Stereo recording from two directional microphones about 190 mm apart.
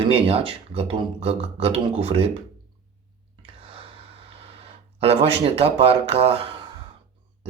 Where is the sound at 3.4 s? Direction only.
30° right (ahead or behind).